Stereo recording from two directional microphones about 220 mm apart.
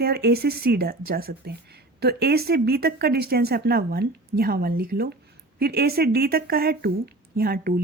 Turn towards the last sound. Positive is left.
turn(degrees=-40)  # may be behind; listen again after turning